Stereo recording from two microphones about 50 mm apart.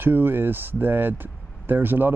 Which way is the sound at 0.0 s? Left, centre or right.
Right.